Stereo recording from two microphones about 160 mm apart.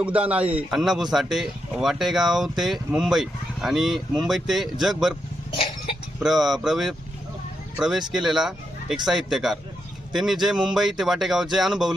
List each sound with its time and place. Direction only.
0.0 s speech: 10° right (ahead or behind)
5.5 s cough: 35° left (ahead or behind)
6.1 s speech: centre (ahead or behind)
8.1 s speech: centre (ahead or behind)